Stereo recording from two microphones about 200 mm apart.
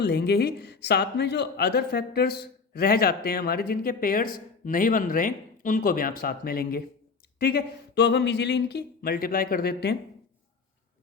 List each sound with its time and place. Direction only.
0.0 s speech: 55° left (ahead or behind)